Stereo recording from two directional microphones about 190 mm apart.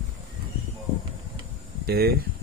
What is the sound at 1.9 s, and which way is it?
Speech, 55° right (ahead or behind).